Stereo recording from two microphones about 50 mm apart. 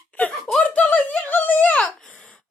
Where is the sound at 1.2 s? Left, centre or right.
Left.